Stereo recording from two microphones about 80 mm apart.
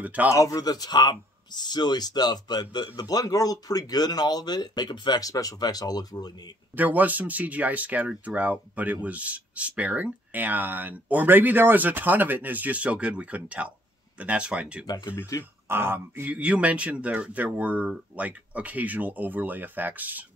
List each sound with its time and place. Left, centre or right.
0.0 s speech: centre
0.3 s speech: left
6.8 s speech: right
15.3 s speech: left
15.7 s speech: right